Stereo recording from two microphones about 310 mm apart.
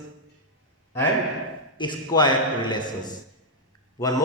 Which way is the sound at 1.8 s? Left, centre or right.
Centre.